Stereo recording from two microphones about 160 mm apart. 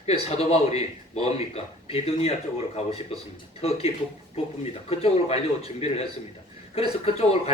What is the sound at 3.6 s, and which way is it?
Speech, 40° left (ahead or behind).